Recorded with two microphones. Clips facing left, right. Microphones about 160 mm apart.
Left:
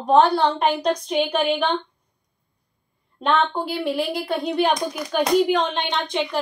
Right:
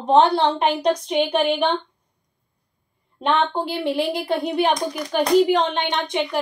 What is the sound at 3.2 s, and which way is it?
A woman's voice, 15° right (ahead or behind).